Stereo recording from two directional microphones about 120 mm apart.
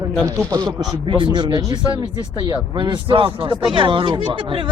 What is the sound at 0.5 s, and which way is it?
Speech, 30° right (ahead or behind).